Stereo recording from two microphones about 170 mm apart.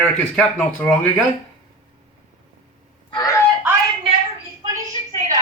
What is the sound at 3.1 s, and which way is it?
Speech, 20° left (ahead or behind).